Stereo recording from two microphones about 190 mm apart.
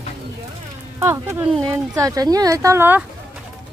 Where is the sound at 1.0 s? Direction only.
15° right (ahead or behind).